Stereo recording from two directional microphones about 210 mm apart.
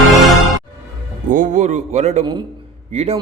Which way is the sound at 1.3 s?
35° right (ahead or behind).